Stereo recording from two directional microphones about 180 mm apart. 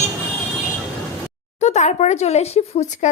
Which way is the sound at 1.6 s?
40° left (ahead or behind).